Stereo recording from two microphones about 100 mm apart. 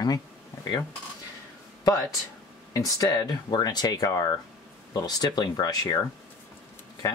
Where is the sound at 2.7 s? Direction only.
35° left (ahead or behind).